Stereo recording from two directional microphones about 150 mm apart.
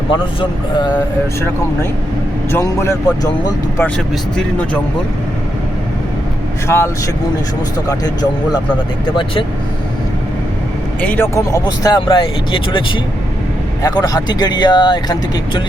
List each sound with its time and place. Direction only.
0.1 s speech: 30° left (ahead or behind)
2.5 s speech: 20° left (ahead or behind)
3.8 s speech: 5° left (ahead or behind)
6.7 s speech: 15° left (ahead or behind)
7.9 s speech: 25° left (ahead or behind)
11.0 s speech: 10° left (ahead or behind)
11.3 s speech: 20° left (ahead or behind)
13.8 s speech: 25° left (ahead or behind)